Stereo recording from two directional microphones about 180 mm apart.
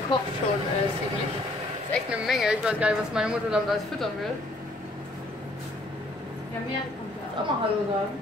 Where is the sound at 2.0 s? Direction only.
5° right (ahead or behind).